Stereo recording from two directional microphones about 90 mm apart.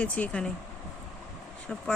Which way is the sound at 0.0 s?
15° left (ahead or behind).